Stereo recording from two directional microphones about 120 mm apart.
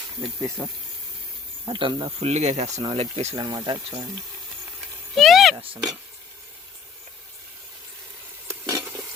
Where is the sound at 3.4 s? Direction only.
35° right (ahead or behind).